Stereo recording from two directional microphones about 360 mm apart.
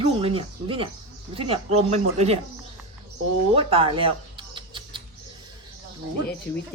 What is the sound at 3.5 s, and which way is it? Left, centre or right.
Mouse, centre.